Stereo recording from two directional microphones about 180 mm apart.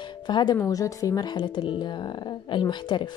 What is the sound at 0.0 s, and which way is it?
Music, 25° left (ahead or behind).